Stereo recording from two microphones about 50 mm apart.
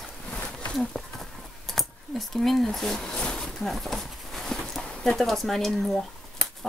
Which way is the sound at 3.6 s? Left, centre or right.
Centre.